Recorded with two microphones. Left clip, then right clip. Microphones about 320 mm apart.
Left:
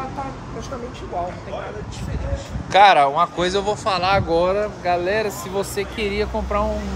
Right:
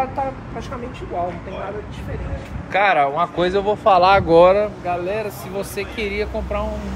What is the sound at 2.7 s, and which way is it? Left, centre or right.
Speech, centre.